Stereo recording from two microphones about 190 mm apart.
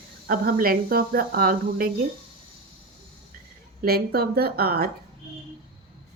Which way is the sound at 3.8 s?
55° right (ahead or behind).